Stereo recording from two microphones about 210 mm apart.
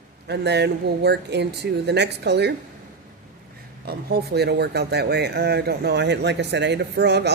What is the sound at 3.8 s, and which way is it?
Speech, 50° right (ahead or behind).